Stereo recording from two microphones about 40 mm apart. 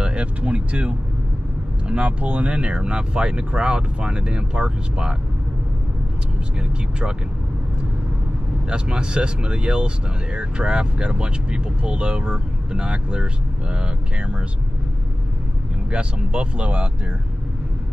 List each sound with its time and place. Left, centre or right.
0.0 s speech: right
8.6 s speech: right
15.9 s speech: right